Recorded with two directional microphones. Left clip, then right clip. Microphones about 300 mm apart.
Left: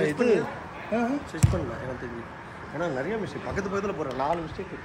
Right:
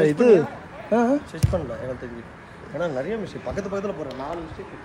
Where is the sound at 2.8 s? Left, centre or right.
Centre.